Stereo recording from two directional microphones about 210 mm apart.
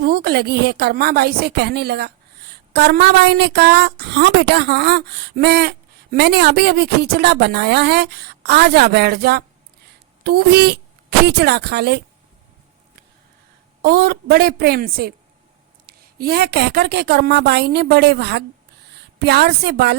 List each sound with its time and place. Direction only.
0.0 s a woman's voice: 45° right (ahead or behind)
13.8 s a woman's voice: 45° right (ahead or behind)